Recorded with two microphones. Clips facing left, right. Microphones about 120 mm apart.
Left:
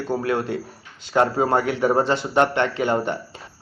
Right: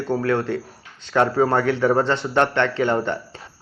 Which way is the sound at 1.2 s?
15° left (ahead or behind).